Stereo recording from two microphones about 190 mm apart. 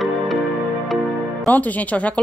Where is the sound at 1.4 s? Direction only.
10° left (ahead or behind).